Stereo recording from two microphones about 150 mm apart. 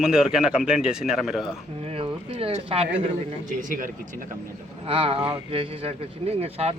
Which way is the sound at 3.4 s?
60° right (ahead or behind).